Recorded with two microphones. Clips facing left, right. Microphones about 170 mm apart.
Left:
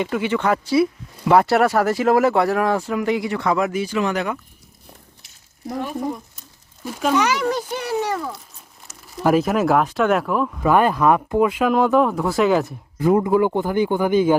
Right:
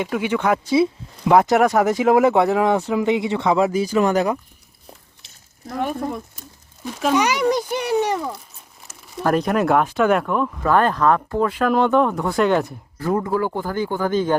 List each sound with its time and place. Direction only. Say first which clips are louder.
0.0 s a child's voice: even; 10° right (ahead or behind)
3.7 s speech: right 4 dB; 40° right (ahead or behind)
5.2 s a sound: right 3 dB; 25° right (ahead or behind)
6.8 s speech: even; centre (ahead or behind)
7.1 s a child's voice: right 2 dB; 15° right (ahead or behind)
8.9 s speech: left 2 dB; centre (ahead or behind)
13.0 s speech: left 5 dB; 15° left (ahead or behind)